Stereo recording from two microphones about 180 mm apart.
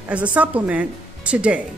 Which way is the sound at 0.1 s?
10° right (ahead or behind).